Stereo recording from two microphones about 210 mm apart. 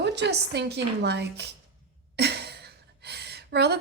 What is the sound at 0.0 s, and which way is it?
A woman's voice, 55° right (ahead or behind).